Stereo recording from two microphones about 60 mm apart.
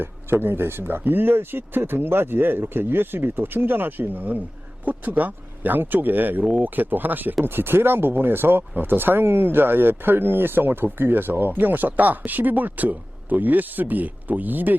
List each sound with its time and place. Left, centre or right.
0.0 s speech: right